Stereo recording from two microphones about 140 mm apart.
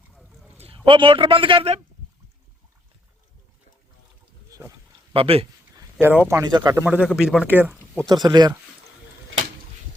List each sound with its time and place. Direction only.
0.1 s a sound: centre (ahead or behind)
0.6 s a man's voice: 40° right (ahead or behind)
5.1 s speech: 45° right (ahead or behind)
5.7 s speech: 15° right (ahead or behind)
6.5 s speech: 30° right (ahead or behind)
6.7 s speech: 10° right (ahead or behind)
8.1 s speech: 30° right (ahead or behind)